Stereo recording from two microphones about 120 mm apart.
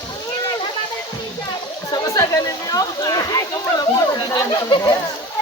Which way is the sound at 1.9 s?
30° left (ahead or behind).